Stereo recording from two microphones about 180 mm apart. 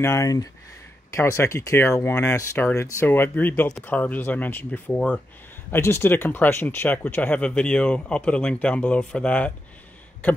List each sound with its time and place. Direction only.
0.0 s speech: 15° left (ahead or behind)